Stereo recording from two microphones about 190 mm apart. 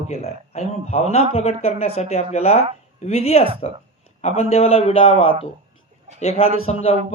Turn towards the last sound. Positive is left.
turn(degrees=35)  # may be behind; listen again after turning